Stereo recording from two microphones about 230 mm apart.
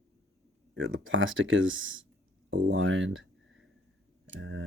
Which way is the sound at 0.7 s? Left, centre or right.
Right.